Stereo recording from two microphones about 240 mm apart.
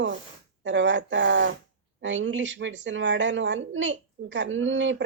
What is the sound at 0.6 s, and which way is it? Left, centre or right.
A woman's voice, right.